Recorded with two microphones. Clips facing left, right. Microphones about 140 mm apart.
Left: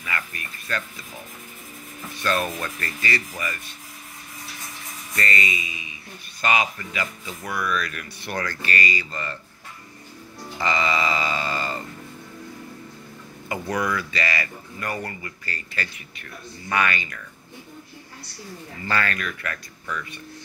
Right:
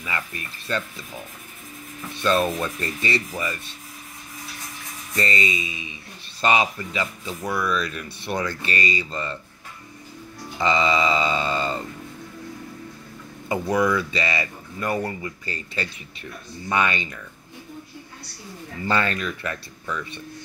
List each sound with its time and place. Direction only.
0.0 s speech: 25° right (ahead or behind)
2.2 s speech: 25° right (ahead or behind)
5.1 s speech: 25° right (ahead or behind)
10.6 s speech: 20° right (ahead or behind)
13.7 s speech: 5° right (ahead or behind)
13.9 s speech: 25° right (ahead or behind)
18.9 s speech: 25° right (ahead or behind)